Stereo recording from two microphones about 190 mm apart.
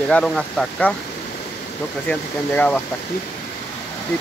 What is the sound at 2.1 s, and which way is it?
Speech, 5° left (ahead or behind).